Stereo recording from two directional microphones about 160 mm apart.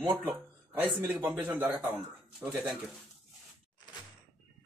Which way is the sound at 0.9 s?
5° right (ahead or behind).